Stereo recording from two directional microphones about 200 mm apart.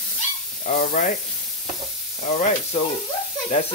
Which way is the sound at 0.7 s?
40° left (ahead or behind).